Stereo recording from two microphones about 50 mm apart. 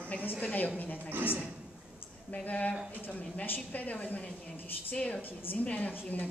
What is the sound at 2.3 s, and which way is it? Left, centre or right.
A woman's voice, left.